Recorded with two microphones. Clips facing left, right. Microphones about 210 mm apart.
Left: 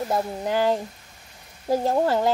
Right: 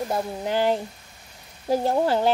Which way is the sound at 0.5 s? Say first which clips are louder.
Even; 25° right (ahead or behind).